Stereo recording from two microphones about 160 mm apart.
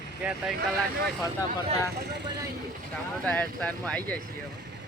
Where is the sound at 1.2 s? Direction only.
20° left (ahead or behind).